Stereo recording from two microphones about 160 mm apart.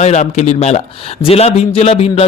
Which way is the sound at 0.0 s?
45° left (ahead or behind).